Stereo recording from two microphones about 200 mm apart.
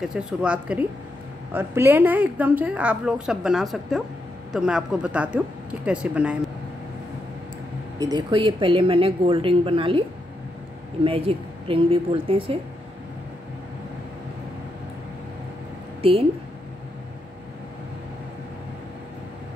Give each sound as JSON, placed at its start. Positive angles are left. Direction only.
{"t": 0.0, "sound": "a woman's voice", "side_deg": -5}
{"t": 8.0, "sound": "a woman's voice", "side_deg": -20}
{"t": 11.1, "sound": "a woman's voice", "side_deg": -25}
{"t": 16.0, "sound": "a woman's voice", "side_deg": -30}